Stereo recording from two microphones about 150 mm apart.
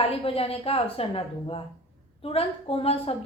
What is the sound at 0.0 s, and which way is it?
A woman's voice, 40° left (ahead or behind).